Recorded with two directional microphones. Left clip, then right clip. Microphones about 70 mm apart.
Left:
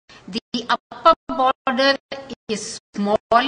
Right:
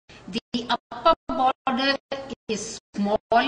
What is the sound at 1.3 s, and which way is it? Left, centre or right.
Music, left.